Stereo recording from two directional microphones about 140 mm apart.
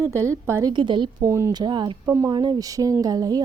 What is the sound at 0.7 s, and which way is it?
Speech, 35° right (ahead or behind).